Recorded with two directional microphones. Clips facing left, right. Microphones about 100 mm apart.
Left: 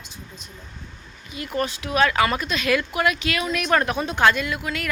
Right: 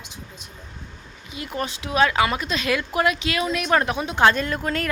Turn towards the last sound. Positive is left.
turn(degrees=-40)  # may be behind; listen again after turning